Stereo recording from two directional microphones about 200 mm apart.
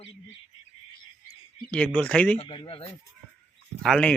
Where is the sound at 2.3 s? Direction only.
25° left (ahead or behind).